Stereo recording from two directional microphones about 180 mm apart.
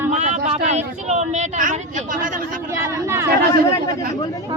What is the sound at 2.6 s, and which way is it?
Speech, 15° right (ahead or behind).